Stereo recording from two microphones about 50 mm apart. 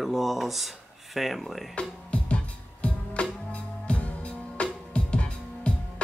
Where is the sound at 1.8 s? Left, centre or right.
Left.